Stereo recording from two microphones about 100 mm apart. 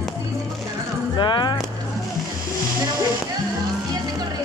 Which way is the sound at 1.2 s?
50° left (ahead or behind).